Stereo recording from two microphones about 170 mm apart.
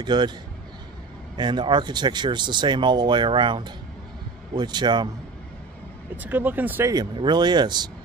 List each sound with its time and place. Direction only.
0.0 s speech: 25° right (ahead or behind)
1.3 s speech: 25° right (ahead or behind)
6.2 s speech: 10° right (ahead or behind)
6.9 s speech: 25° right (ahead or behind)